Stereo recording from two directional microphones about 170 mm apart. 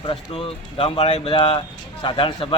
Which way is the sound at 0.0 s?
30° left (ahead or behind).